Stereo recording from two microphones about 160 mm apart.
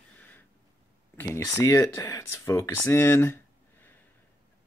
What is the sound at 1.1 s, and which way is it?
Speech, 15° left (ahead or behind).